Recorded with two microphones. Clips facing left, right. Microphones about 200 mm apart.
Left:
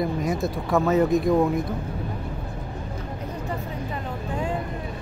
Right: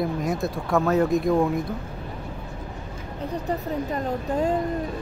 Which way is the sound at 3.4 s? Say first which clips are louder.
Right 6 dB; 40° right (ahead or behind).